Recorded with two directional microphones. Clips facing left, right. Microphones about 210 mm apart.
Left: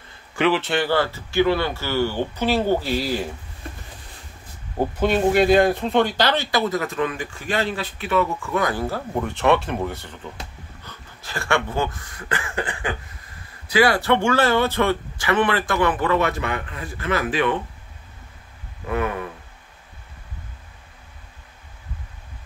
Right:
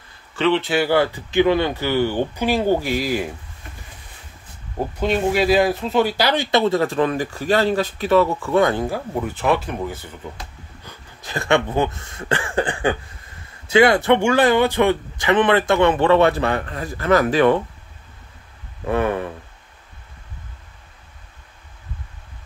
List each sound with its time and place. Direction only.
0.7 s speech: 10° right (ahead or behind)
5.0 s speech: centre (ahead or behind); by 6.6 s 15° right (ahead or behind)
6.7 s speech: 30° right (ahead or behind)
9.3 s speech: centre (ahead or behind)
10.9 s speech: 20° right (ahead or behind); by 17.6 s 40° right (ahead or behind)
18.9 s speech: 30° right (ahead or behind)